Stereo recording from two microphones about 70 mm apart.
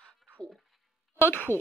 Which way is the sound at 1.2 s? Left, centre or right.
Left.